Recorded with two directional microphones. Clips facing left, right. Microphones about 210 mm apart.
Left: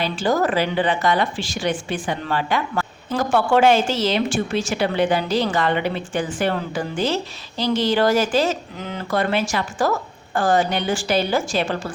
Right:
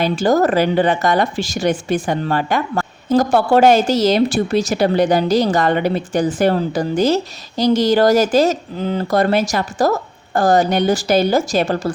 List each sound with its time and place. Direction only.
0.0 s a woman's voice: 45° right (ahead or behind)